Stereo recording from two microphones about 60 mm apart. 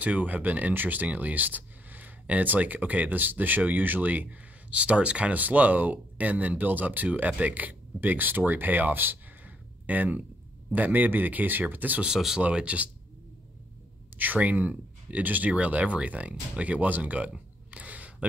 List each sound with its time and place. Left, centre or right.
0.0 s speech: right
12.0 s speech: centre
12.4 s speech: right
14.1 s speech: right